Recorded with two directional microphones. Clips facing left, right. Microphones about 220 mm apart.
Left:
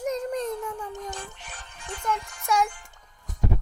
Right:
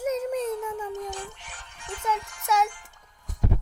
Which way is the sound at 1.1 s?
40° left (ahead or behind).